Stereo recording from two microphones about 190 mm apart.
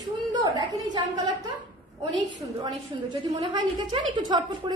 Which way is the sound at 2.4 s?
20° right (ahead or behind).